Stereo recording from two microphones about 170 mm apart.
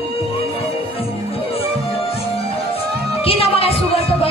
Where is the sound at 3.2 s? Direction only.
35° left (ahead or behind).